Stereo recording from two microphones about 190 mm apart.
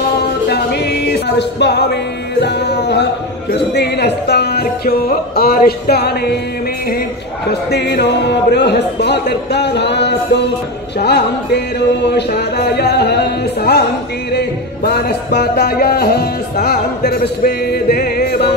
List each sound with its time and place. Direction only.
0.2 s music: 60° left (ahead or behind)
7.7 s music: 65° left (ahead or behind)